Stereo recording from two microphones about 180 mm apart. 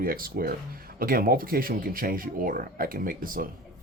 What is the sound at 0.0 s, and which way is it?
Speech, 55° right (ahead or behind).